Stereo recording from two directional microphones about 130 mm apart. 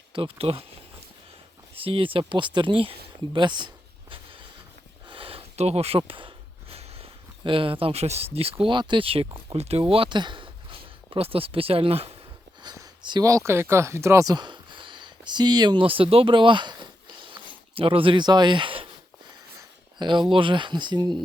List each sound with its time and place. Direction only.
0.1 s speech: 45° right (ahead or behind)
1.7 s speech: 45° right (ahead or behind)
4.1 s a sound: 40° right (ahead or behind)
6.0 s speech: 40° right (ahead or behind)
12.6 s speech: 30° right (ahead or behind)
20.0 s speech: 35° right (ahead or behind)